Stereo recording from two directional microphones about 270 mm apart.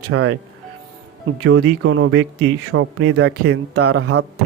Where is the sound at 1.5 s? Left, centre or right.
Right.